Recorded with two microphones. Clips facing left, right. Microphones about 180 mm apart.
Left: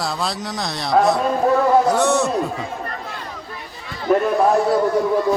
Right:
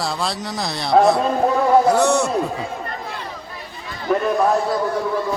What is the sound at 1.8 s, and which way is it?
Speech, centre (ahead or behind).